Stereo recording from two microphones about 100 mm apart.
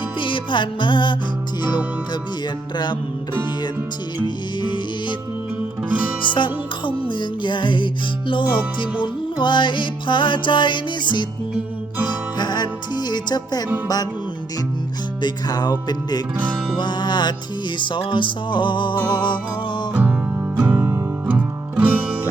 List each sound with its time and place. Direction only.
0.2 s music: 55° left (ahead or behind)
2.7 s music: 50° left (ahead or behind)
4.6 s music: 50° left (ahead or behind)
6.3 s music: 55° left (ahead or behind)
12.4 s music: 45° left (ahead or behind)
15.2 s music: 45° left (ahead or behind)
19.9 s music: 15° right (ahead or behind)